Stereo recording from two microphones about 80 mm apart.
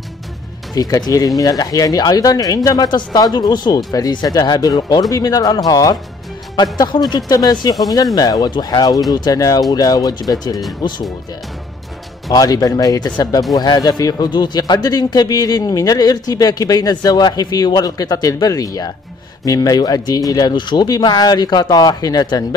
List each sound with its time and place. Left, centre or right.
0.7 s speech: left
6.5 s speech: left
12.3 s speech: left
20.8 s speech: left